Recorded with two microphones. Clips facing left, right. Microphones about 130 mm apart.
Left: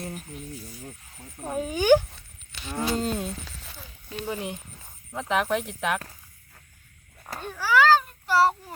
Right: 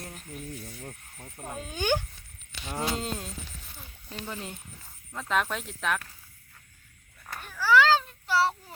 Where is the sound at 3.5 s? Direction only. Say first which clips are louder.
Left 3 dB; 90° left.